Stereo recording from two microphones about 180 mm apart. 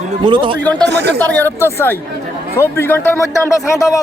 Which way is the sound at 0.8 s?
70° right (ahead or behind).